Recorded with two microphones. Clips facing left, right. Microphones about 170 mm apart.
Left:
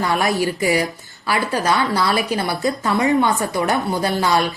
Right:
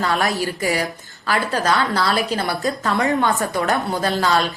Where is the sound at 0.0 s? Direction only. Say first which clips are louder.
Left 2 dB; 15° left (ahead or behind).